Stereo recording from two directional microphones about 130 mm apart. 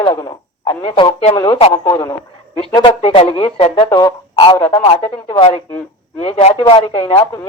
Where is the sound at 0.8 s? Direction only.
40° left (ahead or behind).